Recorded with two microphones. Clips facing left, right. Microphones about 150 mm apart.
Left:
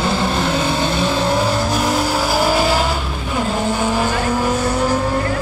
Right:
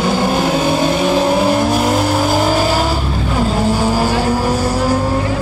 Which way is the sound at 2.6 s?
10° right (ahead or behind).